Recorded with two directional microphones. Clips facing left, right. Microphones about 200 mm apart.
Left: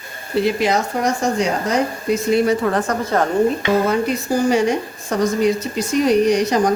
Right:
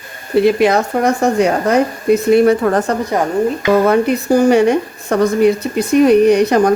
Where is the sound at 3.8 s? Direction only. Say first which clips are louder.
Right 6 dB; 60° right (ahead or behind).